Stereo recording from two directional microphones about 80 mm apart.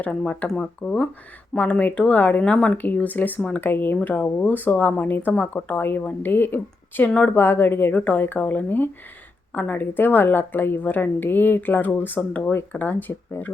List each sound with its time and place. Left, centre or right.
0.0 s speech: centre
2.7 s a woman's voice: left
7.1 s speech: centre
7.3 s a woman's voice: left